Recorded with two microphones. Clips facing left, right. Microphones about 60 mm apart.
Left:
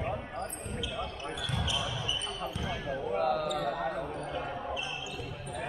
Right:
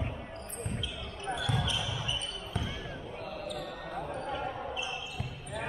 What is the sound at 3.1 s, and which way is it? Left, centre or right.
Basketball bounce, left.